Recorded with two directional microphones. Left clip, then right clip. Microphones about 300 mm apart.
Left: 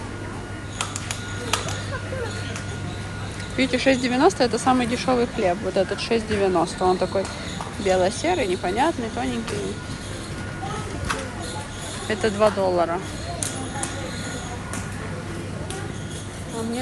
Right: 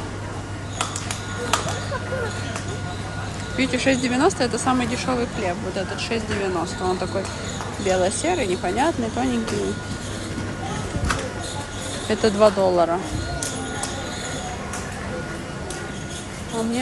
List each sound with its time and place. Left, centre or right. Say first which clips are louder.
3.5 s speech: left 1 dB; centre
7.8 s speech: even; centre
12.1 s speech: right 3 dB; centre